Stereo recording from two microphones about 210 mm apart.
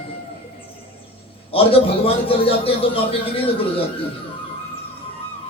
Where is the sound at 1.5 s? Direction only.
25° left (ahead or behind).